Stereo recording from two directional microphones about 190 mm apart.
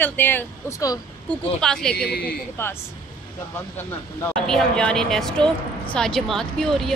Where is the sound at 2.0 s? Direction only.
55° left (ahead or behind).